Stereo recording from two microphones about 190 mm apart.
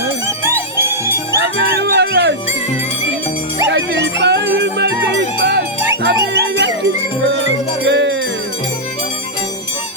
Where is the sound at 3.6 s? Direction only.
65° right (ahead or behind).